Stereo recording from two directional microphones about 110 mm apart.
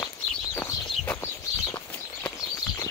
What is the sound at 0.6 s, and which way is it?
Chicken, 25° left (ahead or behind).